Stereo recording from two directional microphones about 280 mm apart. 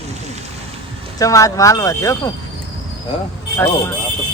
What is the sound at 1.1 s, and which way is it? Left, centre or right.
Speech, centre.